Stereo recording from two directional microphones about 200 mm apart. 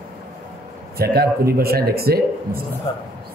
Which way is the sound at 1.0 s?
50° right (ahead or behind).